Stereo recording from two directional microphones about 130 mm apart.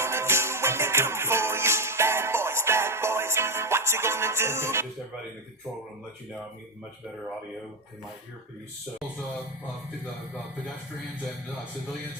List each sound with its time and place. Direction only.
0.0 s music: 20° right (ahead or behind)